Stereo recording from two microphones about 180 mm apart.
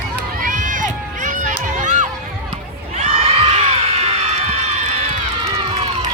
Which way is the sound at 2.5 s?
35° right (ahead or behind).